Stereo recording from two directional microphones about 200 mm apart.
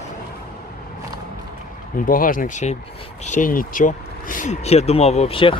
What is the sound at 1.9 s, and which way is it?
Speech, 45° left (ahead or behind).